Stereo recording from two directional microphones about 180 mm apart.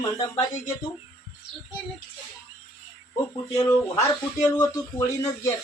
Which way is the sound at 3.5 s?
15° left (ahead or behind).